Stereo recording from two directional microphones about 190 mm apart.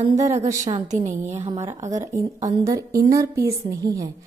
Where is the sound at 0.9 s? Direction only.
40° right (ahead or behind).